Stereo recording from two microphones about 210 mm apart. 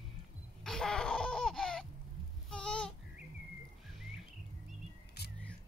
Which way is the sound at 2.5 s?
5° left (ahead or behind).